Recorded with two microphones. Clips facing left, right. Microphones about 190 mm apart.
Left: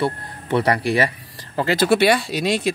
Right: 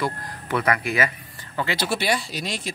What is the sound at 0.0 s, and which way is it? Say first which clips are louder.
Speech: left 4 dB; 30° left (ahead or behind).